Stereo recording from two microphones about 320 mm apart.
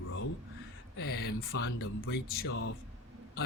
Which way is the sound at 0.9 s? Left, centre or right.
Left.